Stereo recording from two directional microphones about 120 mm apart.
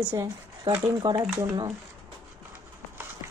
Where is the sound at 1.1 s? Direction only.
30° right (ahead or behind).